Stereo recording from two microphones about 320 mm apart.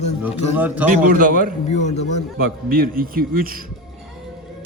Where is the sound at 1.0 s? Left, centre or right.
Right.